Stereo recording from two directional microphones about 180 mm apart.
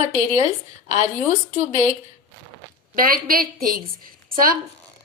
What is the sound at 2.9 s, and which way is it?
A woman's voice, 55° right (ahead or behind).